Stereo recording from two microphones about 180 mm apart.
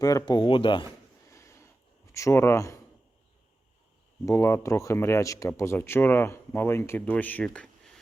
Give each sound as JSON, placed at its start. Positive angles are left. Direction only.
{"t": 0.0, "sound": "speech", "side_deg": 20}
{"t": 1.3, "sound": "a sound", "side_deg": 15}
{"t": 2.1, "sound": "speech", "side_deg": 15}
{"t": 4.3, "sound": "speech", "side_deg": 15}